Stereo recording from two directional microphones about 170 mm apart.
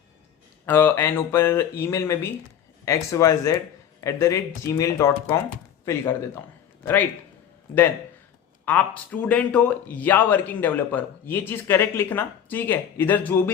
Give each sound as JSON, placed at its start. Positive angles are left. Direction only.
{"t": 0.6, "sound": "a man's voice", "side_deg": 10}
{"t": 9.2, "sound": "a man's voice", "side_deg": 5}